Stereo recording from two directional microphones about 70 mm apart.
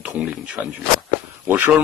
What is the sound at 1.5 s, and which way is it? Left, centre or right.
Speech, right.